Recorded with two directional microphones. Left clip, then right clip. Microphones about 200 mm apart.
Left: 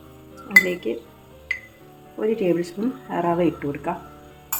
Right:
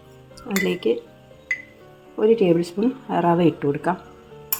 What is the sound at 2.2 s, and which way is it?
Speech, 30° right (ahead or behind).